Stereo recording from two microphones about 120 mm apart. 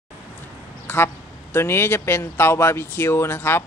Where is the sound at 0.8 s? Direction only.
20° left (ahead or behind).